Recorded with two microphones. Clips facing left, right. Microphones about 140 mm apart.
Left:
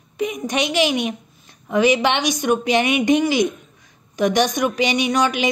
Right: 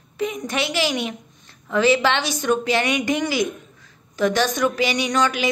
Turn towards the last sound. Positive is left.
turn(degrees=15)  # may be behind; listen again after turning